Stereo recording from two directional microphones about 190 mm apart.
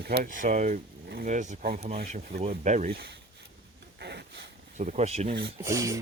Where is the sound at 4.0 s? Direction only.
60° right (ahead or behind).